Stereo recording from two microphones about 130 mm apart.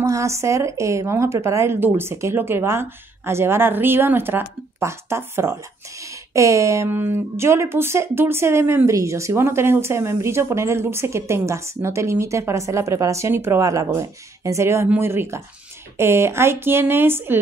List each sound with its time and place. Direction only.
0.0 s speech: 20° right (ahead or behind)